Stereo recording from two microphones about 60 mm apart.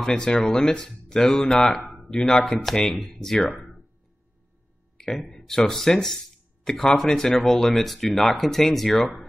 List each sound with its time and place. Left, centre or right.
0.0 s speech: centre
3.3 s speech: left
4.9 s a sound: centre
5.4 s speech: centre